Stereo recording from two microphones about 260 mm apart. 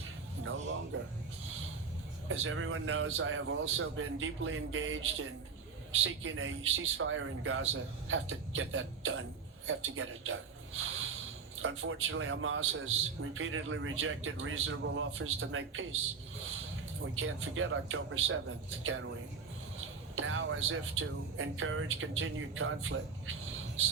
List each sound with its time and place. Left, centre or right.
0.9 s a man's voice: right
2.2 s a man's voice: right
10.8 s a sound: right
11.6 s a man's voice: right
17.0 s a man's voice: right
20.1 s a man's voice: right